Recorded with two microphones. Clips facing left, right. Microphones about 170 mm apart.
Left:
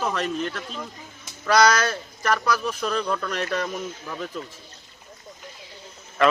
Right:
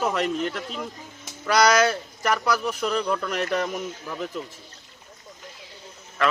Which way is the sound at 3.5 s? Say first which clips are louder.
Right 1 dB; 5° right (ahead or behind).